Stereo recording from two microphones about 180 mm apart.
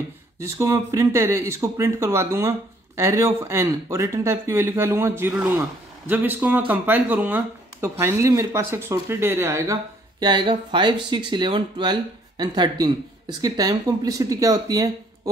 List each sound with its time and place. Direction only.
0.4 s speech: 15° right (ahead or behind)
10.2 s speech: 25° right (ahead or behind)